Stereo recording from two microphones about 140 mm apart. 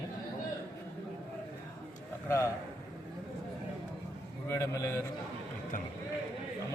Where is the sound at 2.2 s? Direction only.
20° left (ahead or behind).